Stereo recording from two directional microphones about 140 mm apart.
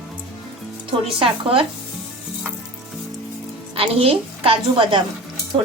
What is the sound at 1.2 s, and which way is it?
Speech, 40° right (ahead or behind).